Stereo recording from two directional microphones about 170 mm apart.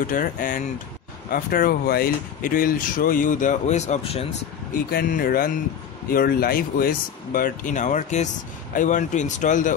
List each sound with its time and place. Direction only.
0.0 s speech: 55° left (ahead or behind); by 4.4 s 35° left (ahead or behind)
4.9 s speech: 60° left (ahead or behind)